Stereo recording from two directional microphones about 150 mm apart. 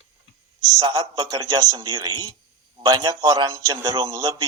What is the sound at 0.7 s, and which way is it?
Speech, 25° right (ahead or behind).